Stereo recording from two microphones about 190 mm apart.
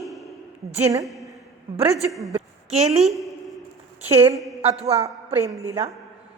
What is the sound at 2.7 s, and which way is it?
Speech, 35° right (ahead or behind).